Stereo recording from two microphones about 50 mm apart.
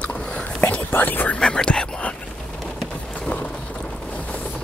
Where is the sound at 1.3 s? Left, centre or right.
Centre.